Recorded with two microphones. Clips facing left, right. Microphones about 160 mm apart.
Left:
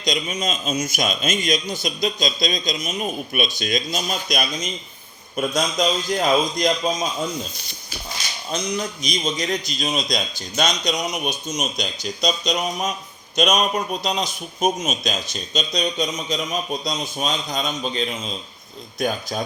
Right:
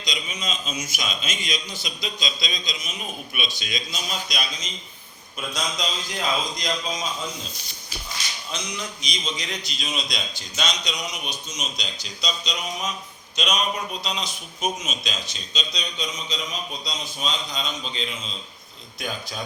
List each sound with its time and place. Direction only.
0.0 s a man's voice: 45° left (ahead or behind)
8.4 s a man's voice: 40° left (ahead or behind)